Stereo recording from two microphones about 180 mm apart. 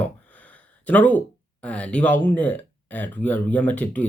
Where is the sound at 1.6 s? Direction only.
5° left (ahead or behind).